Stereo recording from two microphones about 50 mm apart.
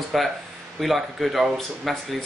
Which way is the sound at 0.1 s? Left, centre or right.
Centre.